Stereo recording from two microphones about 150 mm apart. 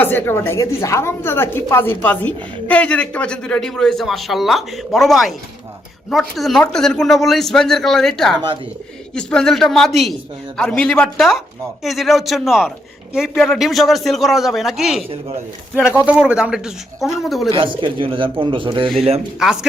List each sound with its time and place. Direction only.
0.0 s a woman's voice: 15° left (ahead or behind)
17.5 s a man's voice: 35° right (ahead or behind)
19.4 s speech: 5° right (ahead or behind)